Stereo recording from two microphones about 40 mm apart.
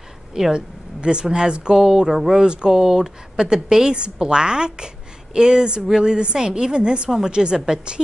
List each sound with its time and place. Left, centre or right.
0.3 s speech: centre